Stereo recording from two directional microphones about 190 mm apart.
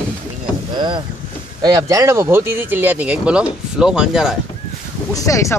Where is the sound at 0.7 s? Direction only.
25° right (ahead or behind); by 4.4 s 5° right (ahead or behind).